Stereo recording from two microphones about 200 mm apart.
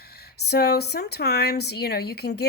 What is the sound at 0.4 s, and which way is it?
Speech, 55° left (ahead or behind).